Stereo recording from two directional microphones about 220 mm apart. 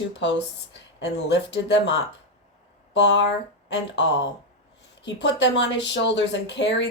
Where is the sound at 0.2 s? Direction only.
55° left (ahead or behind).